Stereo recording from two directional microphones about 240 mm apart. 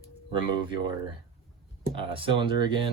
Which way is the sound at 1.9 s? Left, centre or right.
Right.